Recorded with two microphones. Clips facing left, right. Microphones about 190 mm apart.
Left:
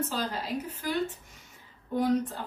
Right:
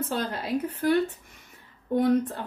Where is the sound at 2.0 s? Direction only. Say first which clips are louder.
Right 3 dB; 55° right (ahead or behind).